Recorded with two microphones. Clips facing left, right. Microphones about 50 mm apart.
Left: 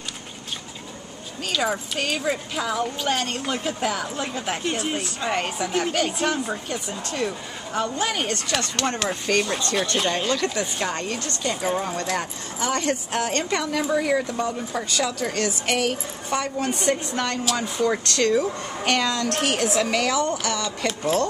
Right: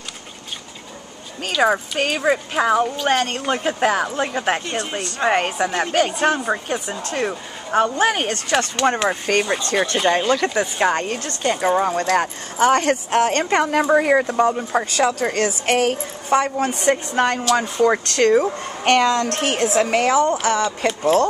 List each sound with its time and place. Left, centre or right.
1.6 s a woman's voice: right
4.6 s speech: centre
5.2 s a woman's voice: right
8.7 s speech: centre
10.8 s a woman's voice: right